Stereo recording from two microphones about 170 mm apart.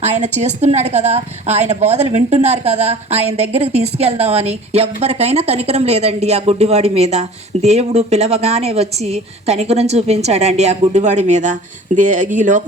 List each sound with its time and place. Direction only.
0.0 s a woman's voice: 40° right (ahead or behind)